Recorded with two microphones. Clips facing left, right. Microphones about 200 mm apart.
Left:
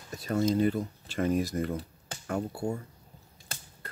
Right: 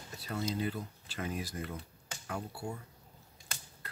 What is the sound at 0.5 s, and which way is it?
Speech, 45° left (ahead or behind).